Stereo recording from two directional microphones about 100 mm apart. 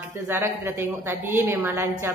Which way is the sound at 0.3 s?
25° right (ahead or behind).